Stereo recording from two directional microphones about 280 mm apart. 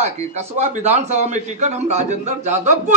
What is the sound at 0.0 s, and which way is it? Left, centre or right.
A man's voice, right.